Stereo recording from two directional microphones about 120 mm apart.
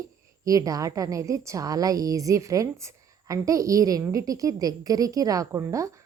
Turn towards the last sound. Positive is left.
turn(degrees=-25)  # may be behind; listen again after turning